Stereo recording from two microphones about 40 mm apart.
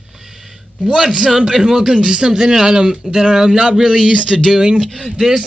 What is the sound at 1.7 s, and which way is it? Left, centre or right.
Speech, centre.